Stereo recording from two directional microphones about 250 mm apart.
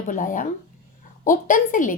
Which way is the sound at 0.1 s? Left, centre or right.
Left.